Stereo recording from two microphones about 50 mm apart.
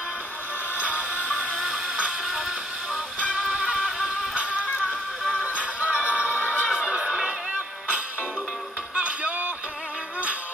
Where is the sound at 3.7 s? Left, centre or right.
Centre.